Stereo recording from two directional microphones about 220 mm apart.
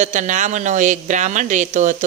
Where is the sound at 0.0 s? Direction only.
35° right (ahead or behind).